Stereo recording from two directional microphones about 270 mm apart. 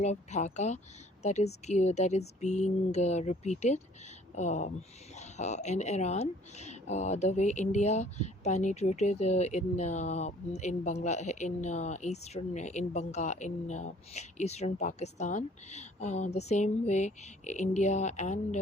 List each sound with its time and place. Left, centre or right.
0.0 s a woman's voice: left